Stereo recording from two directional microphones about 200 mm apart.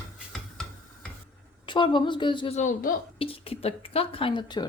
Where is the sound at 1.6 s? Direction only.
25° left (ahead or behind).